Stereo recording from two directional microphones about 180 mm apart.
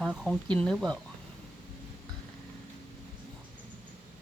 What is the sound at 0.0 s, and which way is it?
Speech, centre (ahead or behind).